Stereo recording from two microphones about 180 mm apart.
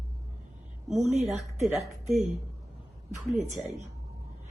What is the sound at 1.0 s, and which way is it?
Speech, 40° right (ahead or behind).